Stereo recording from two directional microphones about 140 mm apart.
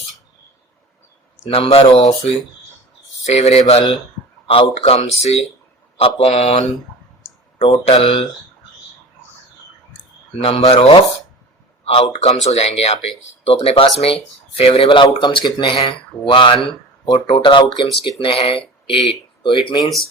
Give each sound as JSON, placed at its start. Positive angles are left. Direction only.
{"t": 1.5, "sound": "speech", "side_deg": 45}
{"t": 7.6, "sound": "speech", "side_deg": 40}
{"t": 10.4, "sound": "speech", "side_deg": 45}
{"t": 12.2, "sound": "speech", "side_deg": 50}